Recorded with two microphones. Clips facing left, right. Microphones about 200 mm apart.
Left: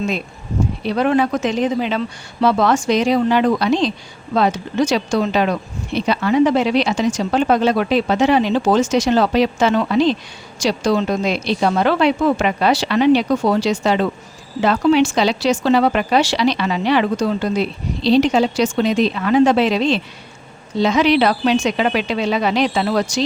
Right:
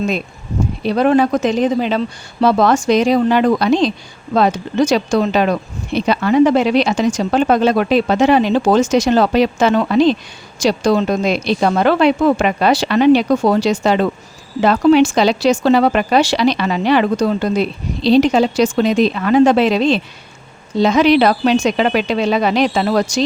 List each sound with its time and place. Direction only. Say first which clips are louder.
0.9 s speech: right 4 dB; 40° right (ahead or behind)